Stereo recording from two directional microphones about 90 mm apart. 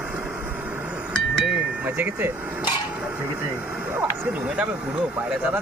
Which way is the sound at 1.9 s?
20° right (ahead or behind).